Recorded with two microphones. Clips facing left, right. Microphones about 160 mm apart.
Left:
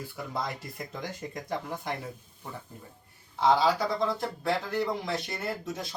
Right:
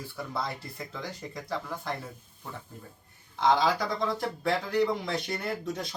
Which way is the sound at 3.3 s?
5° left (ahead or behind).